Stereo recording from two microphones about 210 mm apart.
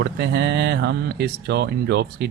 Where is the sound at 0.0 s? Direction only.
55° right (ahead or behind).